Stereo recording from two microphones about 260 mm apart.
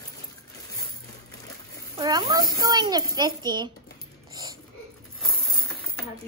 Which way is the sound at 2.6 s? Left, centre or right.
Centre.